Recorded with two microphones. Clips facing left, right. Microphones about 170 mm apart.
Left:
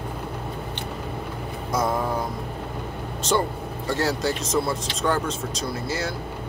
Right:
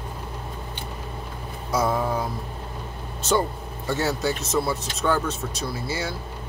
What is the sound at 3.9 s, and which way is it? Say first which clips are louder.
Speech: even; 5° right (ahead or behind).